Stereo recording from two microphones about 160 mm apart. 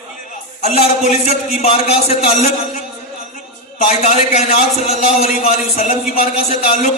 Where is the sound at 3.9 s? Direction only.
45° left (ahead or behind).